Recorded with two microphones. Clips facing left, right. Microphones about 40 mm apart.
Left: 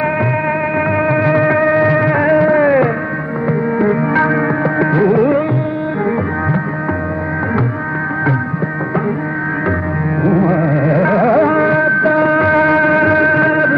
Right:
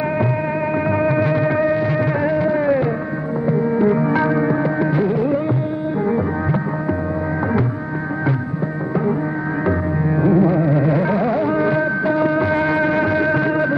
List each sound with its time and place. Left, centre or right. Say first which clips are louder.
0.9 s music: left 5 dB; left
10.2 s music: left 2 dB; left